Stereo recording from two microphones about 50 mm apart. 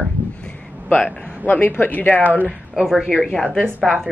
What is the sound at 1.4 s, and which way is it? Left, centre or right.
Speech, left.